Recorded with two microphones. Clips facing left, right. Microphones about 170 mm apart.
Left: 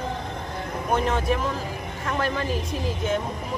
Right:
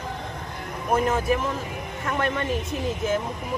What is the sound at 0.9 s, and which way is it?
Speech, 5° right (ahead or behind).